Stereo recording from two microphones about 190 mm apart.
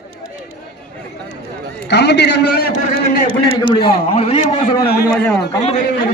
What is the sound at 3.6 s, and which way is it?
A man's voice, 25° left (ahead or behind).